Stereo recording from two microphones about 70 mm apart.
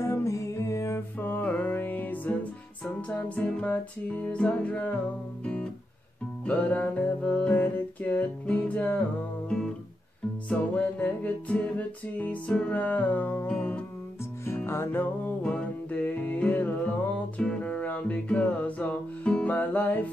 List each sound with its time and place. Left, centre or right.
0.0 s music: left
1.2 s music: left
5.4 s guitar: centre
6.4 s music: left
10.5 s music: centre
13.5 s music: centre
14.7 s music: left
15.4 s music: centre